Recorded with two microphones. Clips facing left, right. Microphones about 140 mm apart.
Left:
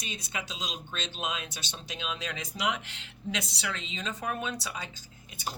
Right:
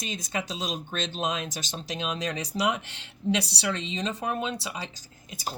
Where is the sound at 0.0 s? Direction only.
40° right (ahead or behind).